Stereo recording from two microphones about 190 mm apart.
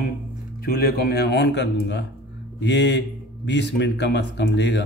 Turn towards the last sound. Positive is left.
turn(degrees=65)  # may be behind; listen again after turning